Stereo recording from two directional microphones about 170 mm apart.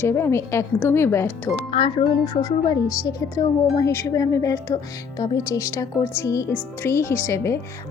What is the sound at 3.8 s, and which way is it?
A woman's voice, 15° left (ahead or behind).